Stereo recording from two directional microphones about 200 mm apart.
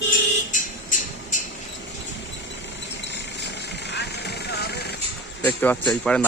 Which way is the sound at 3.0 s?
60° left (ahead or behind).